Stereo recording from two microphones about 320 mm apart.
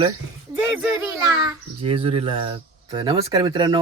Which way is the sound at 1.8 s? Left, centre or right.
Centre.